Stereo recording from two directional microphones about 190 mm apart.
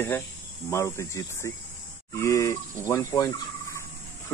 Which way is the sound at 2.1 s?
15° left (ahead or behind).